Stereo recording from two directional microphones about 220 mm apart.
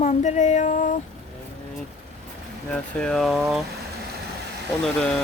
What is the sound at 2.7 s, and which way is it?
Speech, 5° left (ahead or behind).